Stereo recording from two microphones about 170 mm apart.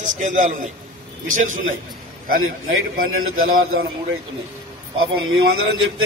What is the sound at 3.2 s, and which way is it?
Speech, 60° right (ahead or behind).